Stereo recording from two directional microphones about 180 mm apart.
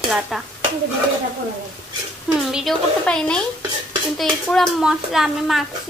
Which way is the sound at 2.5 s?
Centre (ahead or behind).